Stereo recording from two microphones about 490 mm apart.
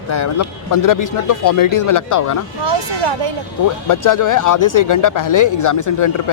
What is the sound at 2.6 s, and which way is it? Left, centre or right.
Speech, right.